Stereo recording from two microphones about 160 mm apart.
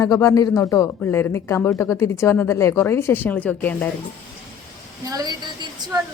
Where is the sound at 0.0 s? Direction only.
20° left (ahead or behind).